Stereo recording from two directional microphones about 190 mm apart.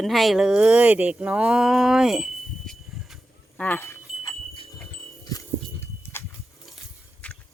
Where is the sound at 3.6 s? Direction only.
10° left (ahead or behind).